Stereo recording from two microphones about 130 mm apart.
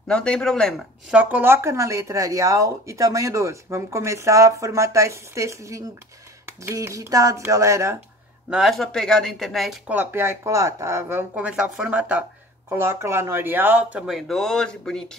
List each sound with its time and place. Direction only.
0.1 s speech: 5° left (ahead or behind)
1.1 s speech: 15° right (ahead or behind)
8.5 s speech: centre (ahead or behind)
9.8 s speech: 15° right (ahead or behind)
11.3 s speech: 10° right (ahead or behind)